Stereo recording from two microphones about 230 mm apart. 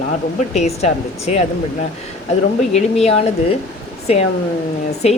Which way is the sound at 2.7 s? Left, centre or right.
Left.